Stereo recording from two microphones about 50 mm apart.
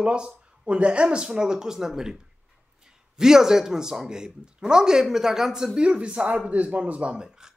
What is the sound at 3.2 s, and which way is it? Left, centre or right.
Speech, centre.